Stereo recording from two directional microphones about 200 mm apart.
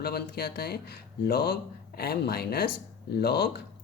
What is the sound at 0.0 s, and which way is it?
Speech, 50° left (ahead or behind).